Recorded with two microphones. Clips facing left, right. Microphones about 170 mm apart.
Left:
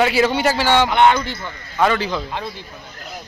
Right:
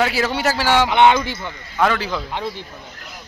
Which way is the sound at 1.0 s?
15° right (ahead or behind).